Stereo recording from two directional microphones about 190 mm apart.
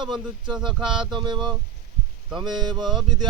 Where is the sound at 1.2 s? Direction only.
25° right (ahead or behind).